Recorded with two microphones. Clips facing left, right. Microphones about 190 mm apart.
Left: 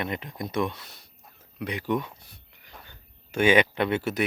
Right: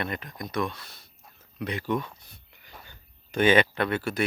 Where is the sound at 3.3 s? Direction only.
10° left (ahead or behind).